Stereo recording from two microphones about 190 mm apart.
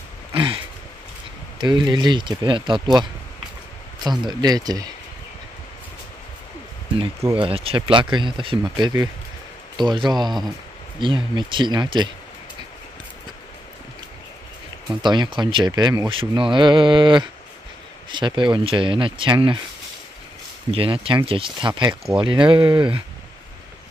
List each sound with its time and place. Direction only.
0.3 s a sound: 25° right (ahead or behind)
1.6 s speech: 25° right (ahead or behind)
4.2 s speech: 20° right (ahead or behind)
7.0 s speech: 25° right (ahead or behind)
15.0 s speech: 25° right (ahead or behind)
20.7 s speech: 30° right (ahead or behind)